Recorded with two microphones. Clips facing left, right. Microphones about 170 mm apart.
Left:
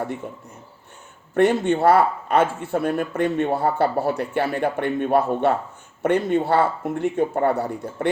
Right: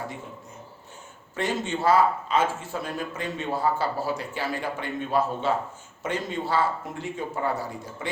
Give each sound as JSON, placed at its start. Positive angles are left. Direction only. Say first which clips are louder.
{"t": 1.3, "sound": "speech", "louder": "left 10 dB", "side_deg": 60}